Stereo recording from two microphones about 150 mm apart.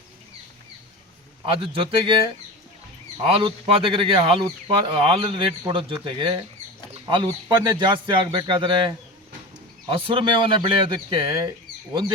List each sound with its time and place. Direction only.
1.5 s speech: 35° right (ahead or behind)
3.2 s speech: 40° right (ahead or behind)